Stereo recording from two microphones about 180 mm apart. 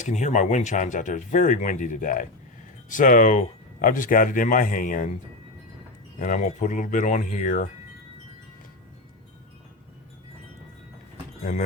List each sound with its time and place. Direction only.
0.0 s speech: 40° left (ahead or behind)
6.1 s speech: 45° left (ahead or behind)